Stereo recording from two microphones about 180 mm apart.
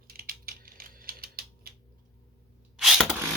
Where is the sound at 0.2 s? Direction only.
55° right (ahead or behind).